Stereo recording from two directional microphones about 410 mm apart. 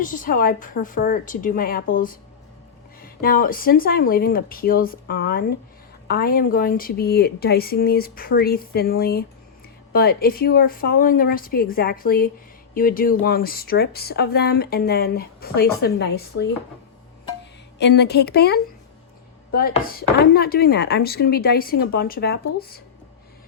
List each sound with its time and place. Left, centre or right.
0.0 s speech: centre
17.7 s speech: left